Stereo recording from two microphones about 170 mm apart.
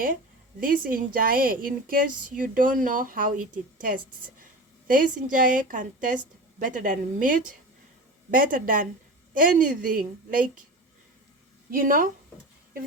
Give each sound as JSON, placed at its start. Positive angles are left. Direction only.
{"t": 0.6, "sound": "a woman's voice", "side_deg": -55}
{"t": 11.7, "sound": "a woman's voice", "side_deg": -55}